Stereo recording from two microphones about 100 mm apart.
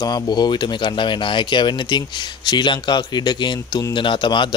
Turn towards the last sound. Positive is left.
turn(degrees=50)  # may be behind; listen again after turning